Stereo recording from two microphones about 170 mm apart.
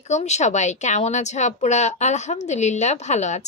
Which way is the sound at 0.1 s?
40° left (ahead or behind).